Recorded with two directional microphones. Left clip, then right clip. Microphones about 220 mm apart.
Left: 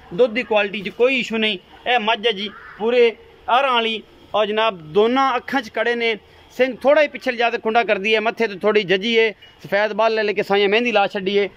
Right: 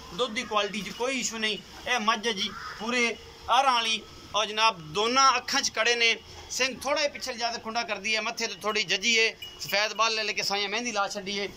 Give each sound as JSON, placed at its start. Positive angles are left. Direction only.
{"t": 0.1, "sound": "a man's voice", "side_deg": 45}